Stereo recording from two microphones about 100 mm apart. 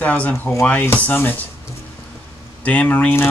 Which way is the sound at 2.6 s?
15° left (ahead or behind).